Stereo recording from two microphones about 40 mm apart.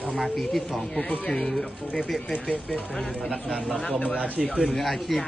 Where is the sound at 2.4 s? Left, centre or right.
Left.